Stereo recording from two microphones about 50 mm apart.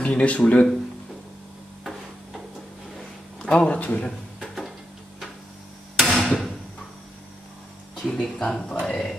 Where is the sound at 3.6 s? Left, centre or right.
Left.